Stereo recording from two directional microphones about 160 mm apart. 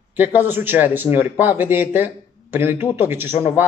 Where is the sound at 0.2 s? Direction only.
15° right (ahead or behind).